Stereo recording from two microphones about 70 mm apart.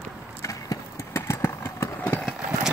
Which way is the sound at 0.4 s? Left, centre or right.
Left.